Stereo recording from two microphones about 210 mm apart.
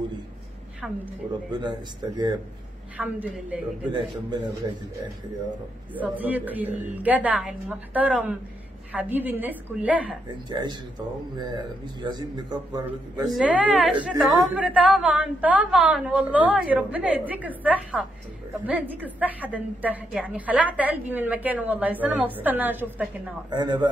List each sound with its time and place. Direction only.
1.5 s a man's voice: 20° right (ahead or behind)
3.0 s a woman's voice: 5° right (ahead or behind)
3.9 s a man's voice: 20° right (ahead or behind)
5.9 s a woman's voice: 10° right (ahead or behind)
10.5 s a man's voice: 20° right (ahead or behind)
13.3 s a woman's voice: 5° right (ahead or behind)
23.5 s a man's voice: 20° right (ahead or behind)